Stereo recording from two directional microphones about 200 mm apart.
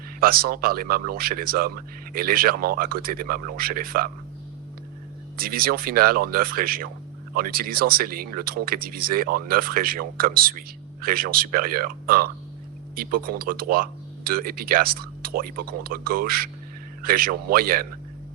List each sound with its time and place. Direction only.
0.2 s speech: 50° right (ahead or behind)
5.4 s speech: 45° right (ahead or behind)